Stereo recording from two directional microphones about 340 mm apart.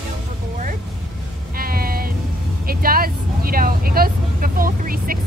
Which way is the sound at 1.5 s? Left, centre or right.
Right.